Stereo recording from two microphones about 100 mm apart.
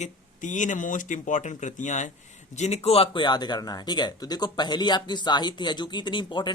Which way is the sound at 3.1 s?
45° left (ahead or behind).